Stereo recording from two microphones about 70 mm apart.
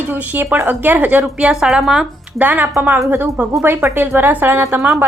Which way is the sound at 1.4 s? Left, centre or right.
Centre.